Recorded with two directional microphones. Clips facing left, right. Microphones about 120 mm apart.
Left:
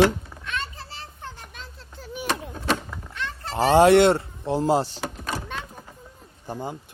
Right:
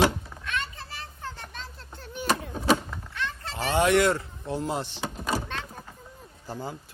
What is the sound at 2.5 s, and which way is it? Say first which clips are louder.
Vehicle: right 2 dB; 5° right (ahead or behind).